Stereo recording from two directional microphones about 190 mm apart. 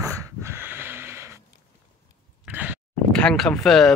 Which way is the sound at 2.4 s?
10° right (ahead or behind).